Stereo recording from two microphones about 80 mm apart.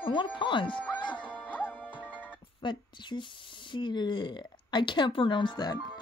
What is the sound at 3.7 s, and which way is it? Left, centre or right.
Speech, left.